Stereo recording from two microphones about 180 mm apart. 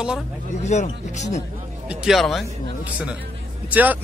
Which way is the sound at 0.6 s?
40° left (ahead or behind).